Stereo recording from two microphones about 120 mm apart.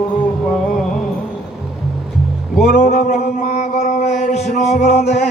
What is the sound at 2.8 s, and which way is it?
Music, 70° left (ahead or behind).